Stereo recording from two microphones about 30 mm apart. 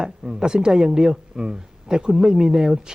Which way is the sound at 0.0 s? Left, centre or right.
Right.